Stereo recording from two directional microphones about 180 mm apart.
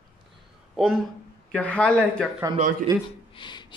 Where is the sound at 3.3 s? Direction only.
25° left (ahead or behind).